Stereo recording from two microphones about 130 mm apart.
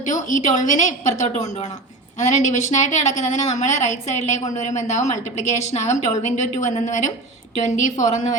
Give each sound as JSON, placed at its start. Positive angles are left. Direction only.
{"t": 0.0, "sound": "a woman's voice", "side_deg": 75}